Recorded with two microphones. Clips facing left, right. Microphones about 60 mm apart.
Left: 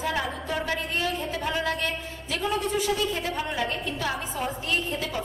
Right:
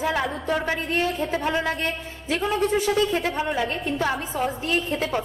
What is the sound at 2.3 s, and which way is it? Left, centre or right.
Speech, right.